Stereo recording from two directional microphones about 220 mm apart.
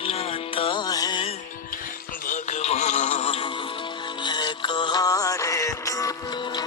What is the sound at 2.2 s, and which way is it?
Music, 35° left (ahead or behind).